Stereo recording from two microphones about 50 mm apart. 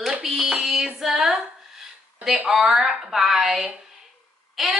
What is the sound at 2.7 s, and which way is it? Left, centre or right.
Speech, centre.